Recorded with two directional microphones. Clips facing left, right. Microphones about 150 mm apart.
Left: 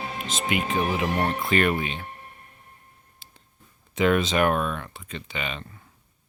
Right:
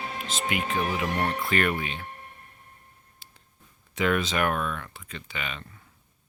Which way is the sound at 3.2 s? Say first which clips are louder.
Left 1 dB; 25° left (ahead or behind).